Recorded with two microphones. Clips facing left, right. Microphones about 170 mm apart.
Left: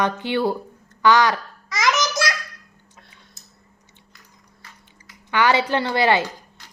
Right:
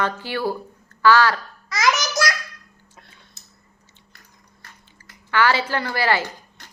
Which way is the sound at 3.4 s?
70° right (ahead or behind).